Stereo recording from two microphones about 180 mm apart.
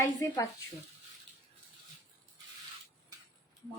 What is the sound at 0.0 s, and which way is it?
Speech, 20° left (ahead or behind).